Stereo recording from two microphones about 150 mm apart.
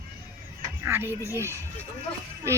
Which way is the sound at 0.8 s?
15° right (ahead or behind).